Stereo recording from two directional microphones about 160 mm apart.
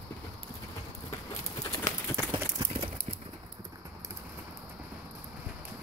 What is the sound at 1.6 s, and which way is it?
Clip-clop, 20° left (ahead or behind).